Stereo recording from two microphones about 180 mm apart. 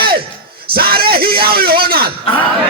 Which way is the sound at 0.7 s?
55° right (ahead or behind).